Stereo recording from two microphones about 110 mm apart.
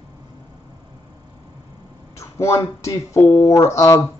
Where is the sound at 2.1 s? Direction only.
25° left (ahead or behind).